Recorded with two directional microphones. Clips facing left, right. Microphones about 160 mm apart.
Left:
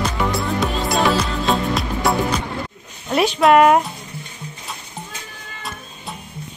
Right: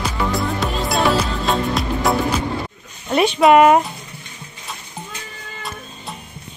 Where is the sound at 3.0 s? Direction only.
Centre (ahead or behind).